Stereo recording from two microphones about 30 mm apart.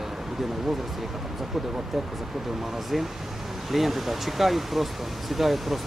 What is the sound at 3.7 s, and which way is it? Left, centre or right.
Speech, centre.